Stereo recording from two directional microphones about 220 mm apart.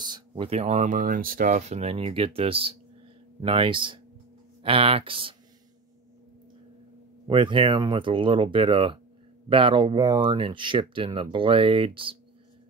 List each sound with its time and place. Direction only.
0.0 s speech: 20° right (ahead or behind)
7.2 s speech: 20° right (ahead or behind)